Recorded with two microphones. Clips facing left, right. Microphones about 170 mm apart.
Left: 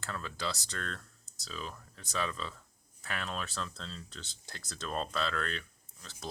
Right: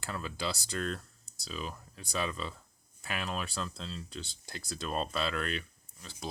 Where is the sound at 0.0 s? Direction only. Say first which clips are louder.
Right 2 dB; 10° right (ahead or behind).